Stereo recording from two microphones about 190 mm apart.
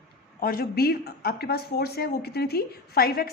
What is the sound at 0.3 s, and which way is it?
A woman's voice, 50° left (ahead or behind).